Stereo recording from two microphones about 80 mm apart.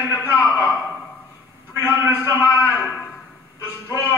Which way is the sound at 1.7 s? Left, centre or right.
Right.